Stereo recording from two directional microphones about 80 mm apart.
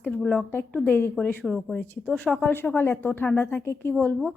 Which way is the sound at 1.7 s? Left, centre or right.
Left.